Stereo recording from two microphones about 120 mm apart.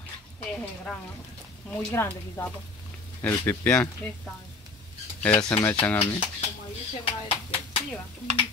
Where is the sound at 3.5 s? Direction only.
15° left (ahead or behind).